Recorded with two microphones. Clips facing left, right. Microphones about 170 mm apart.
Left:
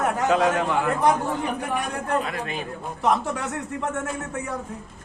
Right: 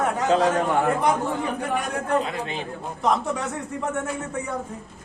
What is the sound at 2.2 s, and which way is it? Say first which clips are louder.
Speech: even; 25° right (ahead or behind).